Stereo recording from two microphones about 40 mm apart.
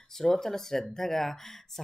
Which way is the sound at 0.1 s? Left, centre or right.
Centre.